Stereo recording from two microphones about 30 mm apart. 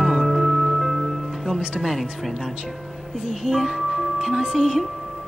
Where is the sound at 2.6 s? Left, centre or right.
Centre.